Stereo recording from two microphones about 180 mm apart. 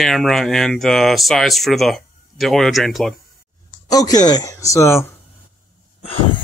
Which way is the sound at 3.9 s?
20° left (ahead or behind).